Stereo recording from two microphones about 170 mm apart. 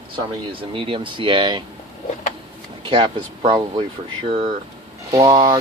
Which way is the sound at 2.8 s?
30° right (ahead or behind).